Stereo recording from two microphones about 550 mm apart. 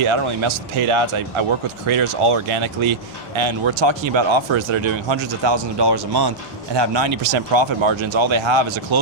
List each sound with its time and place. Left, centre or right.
0.1 s speech: right